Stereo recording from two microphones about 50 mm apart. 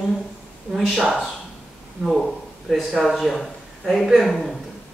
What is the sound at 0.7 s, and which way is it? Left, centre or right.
Speech, centre.